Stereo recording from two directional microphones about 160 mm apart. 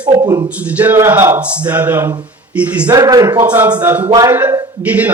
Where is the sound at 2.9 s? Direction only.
25° right (ahead or behind).